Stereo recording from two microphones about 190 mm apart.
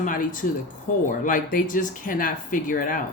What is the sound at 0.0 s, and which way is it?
Speech, 45° left (ahead or behind).